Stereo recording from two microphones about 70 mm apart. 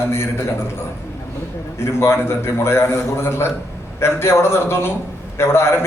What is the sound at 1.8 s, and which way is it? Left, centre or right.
A man's voice, left.